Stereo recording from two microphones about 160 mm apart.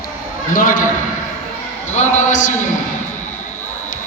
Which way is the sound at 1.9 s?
50° left (ahead or behind).